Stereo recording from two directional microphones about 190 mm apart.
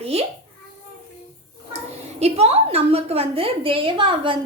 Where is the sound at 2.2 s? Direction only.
35° right (ahead or behind).